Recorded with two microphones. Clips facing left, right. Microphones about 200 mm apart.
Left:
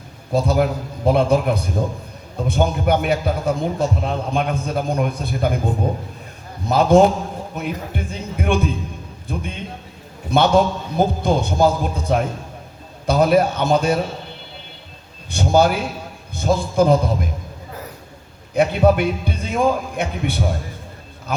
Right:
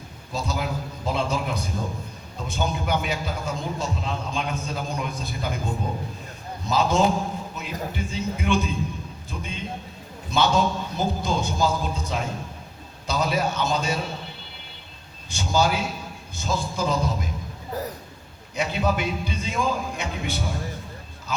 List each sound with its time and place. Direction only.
0.3 s a man's voice: 55° left (ahead or behind)
15.3 s a man's voice: 55° left (ahead or behind)
18.5 s a man's voice: 55° left (ahead or behind)